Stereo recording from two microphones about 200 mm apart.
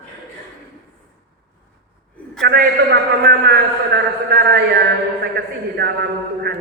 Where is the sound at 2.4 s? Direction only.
55° right (ahead or behind).